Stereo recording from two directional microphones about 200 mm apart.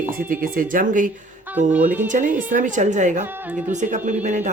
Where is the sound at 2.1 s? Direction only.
40° right (ahead or behind).